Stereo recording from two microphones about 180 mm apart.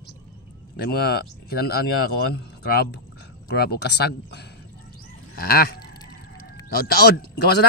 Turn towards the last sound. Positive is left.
turn(degrees=65)  # may be behind; listen again after turning